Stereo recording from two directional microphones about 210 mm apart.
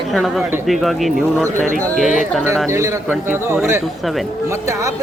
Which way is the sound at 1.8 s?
5° left (ahead or behind).